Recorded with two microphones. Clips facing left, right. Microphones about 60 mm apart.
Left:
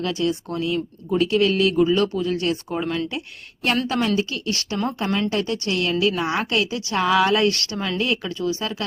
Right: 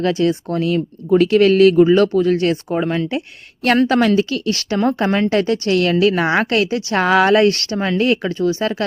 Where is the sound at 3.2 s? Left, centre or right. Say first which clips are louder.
Right 5 dB; right.